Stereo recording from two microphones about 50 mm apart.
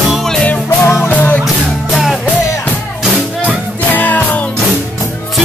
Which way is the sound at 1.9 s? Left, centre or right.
Centre.